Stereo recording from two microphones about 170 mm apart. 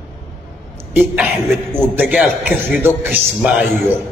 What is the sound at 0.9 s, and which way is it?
Throat clearing, 10° right (ahead or behind).